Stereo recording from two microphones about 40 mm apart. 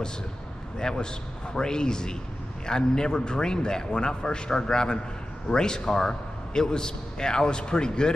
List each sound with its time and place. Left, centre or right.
0.7 s a man's voice: centre